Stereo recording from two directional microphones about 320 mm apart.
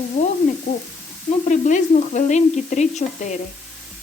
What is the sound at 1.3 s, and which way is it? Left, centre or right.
Speech, left.